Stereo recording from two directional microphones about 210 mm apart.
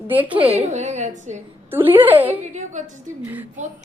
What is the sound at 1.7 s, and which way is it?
Speech, 10° right (ahead or behind).